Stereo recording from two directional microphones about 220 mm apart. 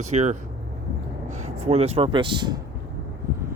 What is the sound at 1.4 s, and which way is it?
Speech, 30° right (ahead or behind).